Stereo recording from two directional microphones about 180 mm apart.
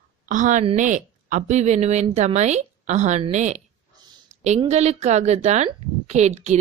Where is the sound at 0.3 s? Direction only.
45° right (ahead or behind).